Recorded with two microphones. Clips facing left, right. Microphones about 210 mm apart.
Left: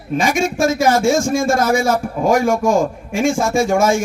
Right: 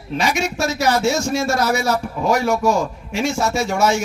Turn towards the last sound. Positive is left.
turn(degrees=50)  # may be behind; listen again after turning